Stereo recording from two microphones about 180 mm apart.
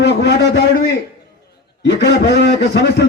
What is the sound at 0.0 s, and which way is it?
Speech, 70° left (ahead or behind).